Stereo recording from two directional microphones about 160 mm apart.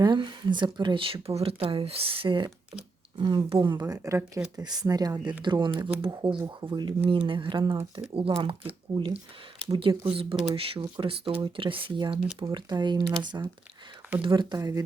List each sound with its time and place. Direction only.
0.0 s speech: 30° right (ahead or behind)